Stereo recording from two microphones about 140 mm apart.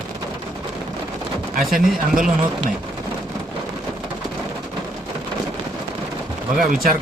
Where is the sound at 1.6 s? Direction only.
Centre (ahead or behind).